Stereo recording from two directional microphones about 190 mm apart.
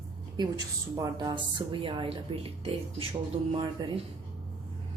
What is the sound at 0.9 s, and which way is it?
Speech, 20° right (ahead or behind).